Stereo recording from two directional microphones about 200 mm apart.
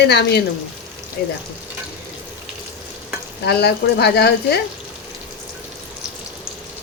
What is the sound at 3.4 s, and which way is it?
Speech, 55° left (ahead or behind).